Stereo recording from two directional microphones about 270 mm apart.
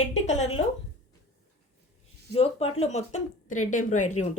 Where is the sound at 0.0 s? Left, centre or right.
Left.